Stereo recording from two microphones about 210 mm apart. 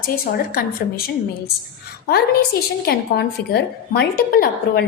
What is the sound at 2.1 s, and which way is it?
A woman's voice, 50° left (ahead or behind).